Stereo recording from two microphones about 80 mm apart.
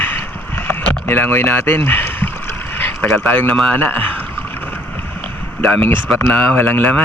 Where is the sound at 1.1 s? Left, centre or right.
Left.